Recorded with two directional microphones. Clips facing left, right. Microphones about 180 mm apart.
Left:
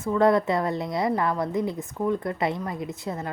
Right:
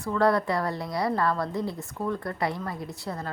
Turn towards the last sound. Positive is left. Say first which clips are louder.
# left 3 dB
turn(degrees=20)  # may be behind; listen again after turning